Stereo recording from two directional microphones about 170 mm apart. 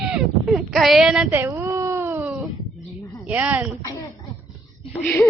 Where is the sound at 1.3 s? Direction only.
15° right (ahead or behind).